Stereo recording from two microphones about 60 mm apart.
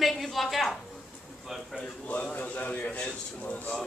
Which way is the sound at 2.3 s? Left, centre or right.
Left.